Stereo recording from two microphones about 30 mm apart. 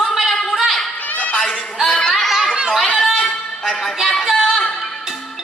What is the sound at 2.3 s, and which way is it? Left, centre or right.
Chatter, centre.